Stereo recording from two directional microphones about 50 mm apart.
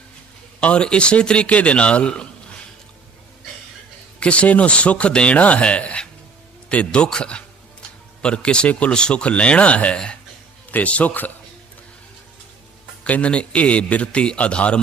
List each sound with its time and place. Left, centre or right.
0.6 s speech: left
4.2 s a man's voice: left
13.1 s speech: left